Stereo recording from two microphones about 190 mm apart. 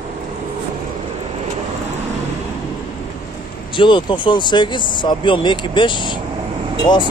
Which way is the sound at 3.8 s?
25° left (ahead or behind).